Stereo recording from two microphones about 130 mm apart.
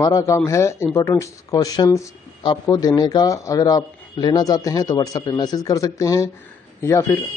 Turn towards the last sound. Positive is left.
turn(degrees=20)  # may be behind; listen again after turning